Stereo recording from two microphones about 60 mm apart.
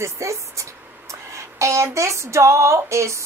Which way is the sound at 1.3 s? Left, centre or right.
Right.